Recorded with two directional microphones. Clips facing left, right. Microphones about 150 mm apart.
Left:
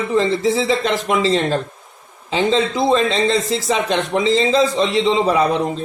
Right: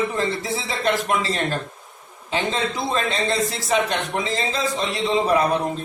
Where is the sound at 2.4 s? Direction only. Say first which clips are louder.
Left 11 dB; 90° left.